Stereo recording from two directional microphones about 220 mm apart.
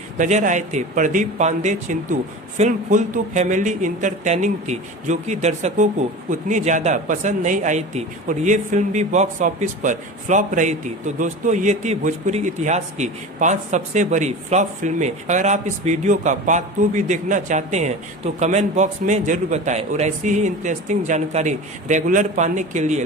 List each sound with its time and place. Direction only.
0.2 s speech: 35° right (ahead or behind)